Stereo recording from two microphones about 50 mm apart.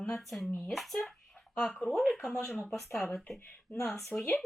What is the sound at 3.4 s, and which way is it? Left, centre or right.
Speech, left.